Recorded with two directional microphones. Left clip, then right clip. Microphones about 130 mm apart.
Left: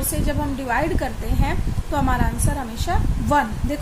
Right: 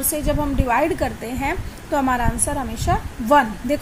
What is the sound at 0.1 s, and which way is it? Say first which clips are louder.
A woman's voice: right 5 dB; 25° right (ahead or behind).